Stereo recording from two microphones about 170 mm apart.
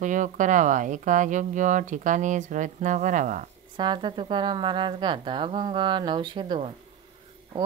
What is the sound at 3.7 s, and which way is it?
A woman's voice, 25° right (ahead or behind).